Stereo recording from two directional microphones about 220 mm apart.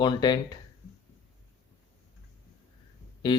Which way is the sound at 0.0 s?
20° left (ahead or behind).